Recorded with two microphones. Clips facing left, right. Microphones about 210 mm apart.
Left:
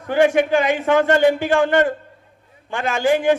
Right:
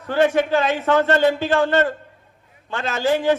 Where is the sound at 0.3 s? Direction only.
15° left (ahead or behind).